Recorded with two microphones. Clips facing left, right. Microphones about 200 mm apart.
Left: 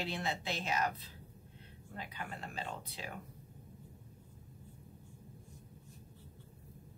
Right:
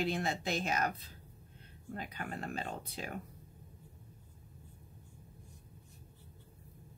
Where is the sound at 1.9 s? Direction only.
45° right (ahead or behind).